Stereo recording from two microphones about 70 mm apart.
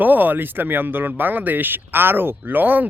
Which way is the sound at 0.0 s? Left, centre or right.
Right.